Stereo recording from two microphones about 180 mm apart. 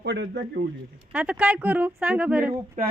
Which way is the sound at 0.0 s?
70° right (ahead or behind).